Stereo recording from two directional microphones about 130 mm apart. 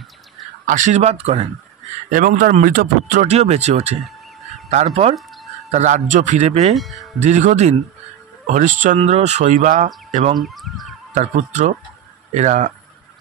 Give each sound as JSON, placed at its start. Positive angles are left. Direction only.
{"t": 0.7, "sound": "speech", "side_deg": -75}
{"t": 2.0, "sound": "a man's voice", "side_deg": -90}
{"t": 6.7, "sound": "speech", "side_deg": 0}
{"t": 7.2, "sound": "a man's voice", "side_deg": -65}
{"t": 8.9, "sound": "speech", "side_deg": -55}
{"t": 10.3, "sound": "speech", "side_deg": 0}
{"t": 11.1, "sound": "a man's voice", "side_deg": -65}